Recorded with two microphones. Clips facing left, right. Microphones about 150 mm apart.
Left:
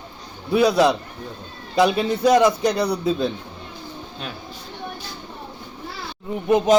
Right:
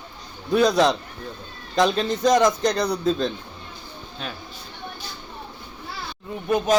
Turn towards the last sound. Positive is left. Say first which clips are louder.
# left 4 dB
turn(degrees=20)  # may be behind; listen again after turning